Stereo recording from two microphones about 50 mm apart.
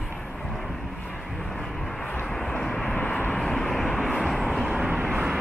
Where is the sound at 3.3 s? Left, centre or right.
Centre.